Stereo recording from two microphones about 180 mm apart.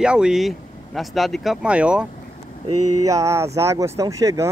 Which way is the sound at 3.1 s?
15° right (ahead or behind).